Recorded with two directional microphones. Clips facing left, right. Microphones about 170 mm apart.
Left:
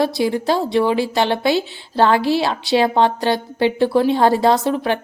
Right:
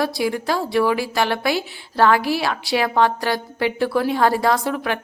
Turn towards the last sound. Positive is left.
turn(degrees=30)  # may be behind; listen again after turning